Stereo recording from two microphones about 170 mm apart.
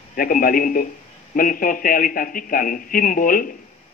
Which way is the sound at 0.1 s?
55° left (ahead or behind).